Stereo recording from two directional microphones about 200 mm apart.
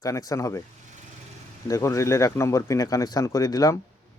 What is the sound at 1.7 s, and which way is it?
Speech, 15° left (ahead or behind).